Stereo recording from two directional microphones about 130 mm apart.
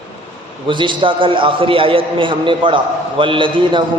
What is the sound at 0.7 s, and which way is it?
A man's voice, 40° right (ahead or behind).